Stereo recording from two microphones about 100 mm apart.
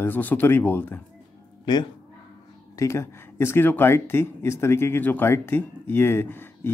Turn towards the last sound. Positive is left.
turn(degrees=20)  # may be behind; listen again after turning